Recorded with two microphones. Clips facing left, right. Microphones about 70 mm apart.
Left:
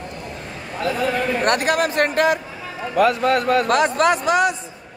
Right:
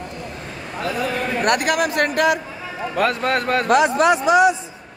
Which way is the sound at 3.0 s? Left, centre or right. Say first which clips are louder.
Left 3 dB; right.